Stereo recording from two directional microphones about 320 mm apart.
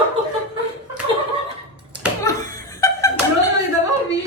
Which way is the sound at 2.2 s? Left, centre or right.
Centre.